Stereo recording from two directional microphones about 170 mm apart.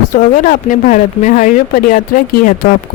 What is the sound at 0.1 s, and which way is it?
Speech, 50° left (ahead or behind).